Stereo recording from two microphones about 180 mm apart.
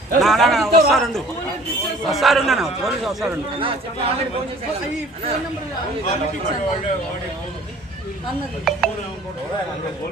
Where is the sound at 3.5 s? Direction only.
30° right (ahead or behind).